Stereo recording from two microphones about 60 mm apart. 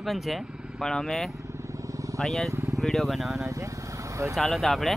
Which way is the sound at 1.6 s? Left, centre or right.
Right.